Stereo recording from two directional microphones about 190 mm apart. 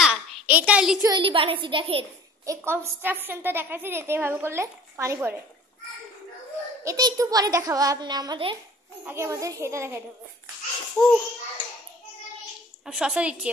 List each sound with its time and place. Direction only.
0.0 s a sound: 5° right (ahead or behind)
1.0 s a child's voice: 25° right (ahead or behind)
2.4 s a woman's voice: 15° right (ahead or behind)
6.8 s a child's voice: 20° right (ahead or behind)
9.0 s a woman's voice: 15° right (ahead or behind)
11.0 s a woman's voice: centre (ahead or behind)
12.8 s a woman's voice: 5° right (ahead or behind)